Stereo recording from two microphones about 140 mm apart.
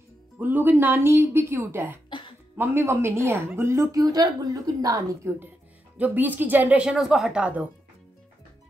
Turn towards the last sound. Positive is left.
turn(degrees=-10)  # may be behind; listen again after turning